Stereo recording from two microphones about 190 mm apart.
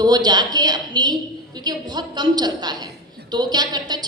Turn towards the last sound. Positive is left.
turn(degrees=-20)  # may be behind; listen again after turning